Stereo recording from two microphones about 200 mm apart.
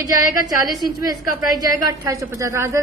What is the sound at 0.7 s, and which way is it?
A woman's voice, 20° right (ahead or behind).